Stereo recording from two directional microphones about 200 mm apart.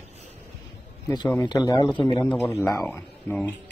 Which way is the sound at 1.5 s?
20° left (ahead or behind).